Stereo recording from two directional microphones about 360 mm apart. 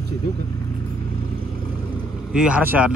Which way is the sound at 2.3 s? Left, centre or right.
Centre.